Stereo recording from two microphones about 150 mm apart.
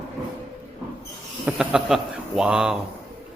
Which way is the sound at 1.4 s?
5° right (ahead or behind).